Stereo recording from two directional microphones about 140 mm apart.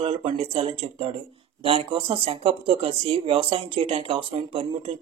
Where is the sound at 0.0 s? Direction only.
45° right (ahead or behind).